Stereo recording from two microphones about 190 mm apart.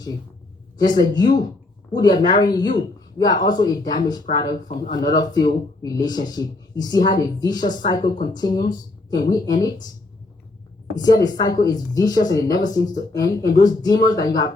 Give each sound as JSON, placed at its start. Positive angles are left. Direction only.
{"t": 0.9, "sound": "speech", "side_deg": 20}
{"t": 4.4, "sound": "speech", "side_deg": 45}
{"t": 4.9, "sound": "speech", "side_deg": 20}
{"t": 10.9, "sound": "speech", "side_deg": 20}